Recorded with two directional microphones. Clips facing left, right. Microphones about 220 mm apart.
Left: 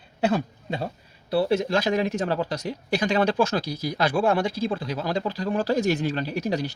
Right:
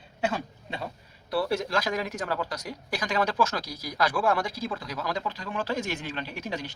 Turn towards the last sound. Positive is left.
turn(degrees=35)  # may be behind; listen again after turning